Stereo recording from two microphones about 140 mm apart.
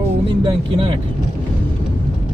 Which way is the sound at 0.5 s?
35° right (ahead or behind).